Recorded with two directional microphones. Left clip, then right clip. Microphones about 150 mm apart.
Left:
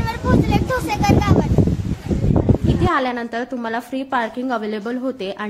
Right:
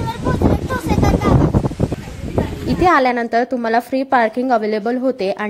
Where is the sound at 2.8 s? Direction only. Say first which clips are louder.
Right 10 dB; 45° right (ahead or behind).